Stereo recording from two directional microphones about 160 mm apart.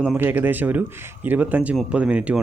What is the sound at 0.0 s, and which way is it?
Speech, 10° right (ahead or behind).